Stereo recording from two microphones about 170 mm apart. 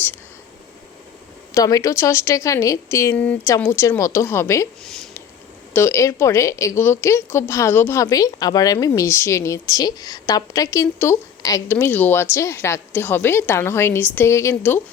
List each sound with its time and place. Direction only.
1.5 s a woman's voice: 20° left (ahead or behind)
4.8 s a sound: centre (ahead or behind)
5.7 s a woman's voice: 15° left (ahead or behind)